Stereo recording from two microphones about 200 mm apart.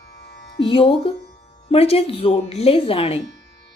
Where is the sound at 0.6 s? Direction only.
25° left (ahead or behind).